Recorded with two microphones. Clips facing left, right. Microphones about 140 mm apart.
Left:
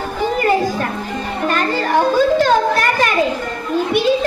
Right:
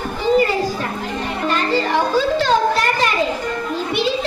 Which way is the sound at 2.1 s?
50° left (ahead or behind).